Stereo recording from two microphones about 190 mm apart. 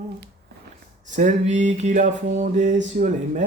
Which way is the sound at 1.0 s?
40° right (ahead or behind).